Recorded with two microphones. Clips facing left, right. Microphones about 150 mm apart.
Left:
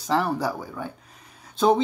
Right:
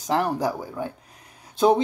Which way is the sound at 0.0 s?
15° right (ahead or behind).